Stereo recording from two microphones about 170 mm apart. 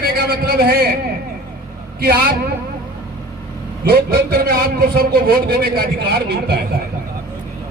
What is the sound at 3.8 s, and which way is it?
A man's voice, 65° right (ahead or behind).